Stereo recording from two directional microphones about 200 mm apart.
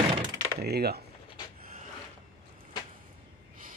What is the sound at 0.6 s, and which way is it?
Speech, 55° right (ahead or behind).